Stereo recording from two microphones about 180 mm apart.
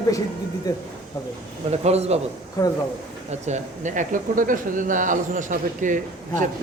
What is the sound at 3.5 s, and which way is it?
Speech, 45° right (ahead or behind).